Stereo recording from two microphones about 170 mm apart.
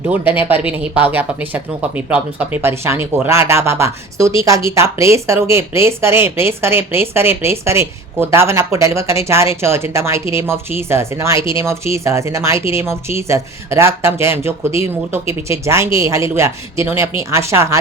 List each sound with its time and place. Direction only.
0.1 s speech: 10° right (ahead or behind)